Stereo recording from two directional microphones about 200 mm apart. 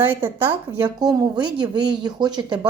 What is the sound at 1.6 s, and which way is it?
Speech, 20° right (ahead or behind).